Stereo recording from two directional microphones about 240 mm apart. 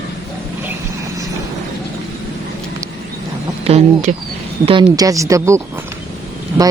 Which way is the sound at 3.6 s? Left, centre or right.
Right.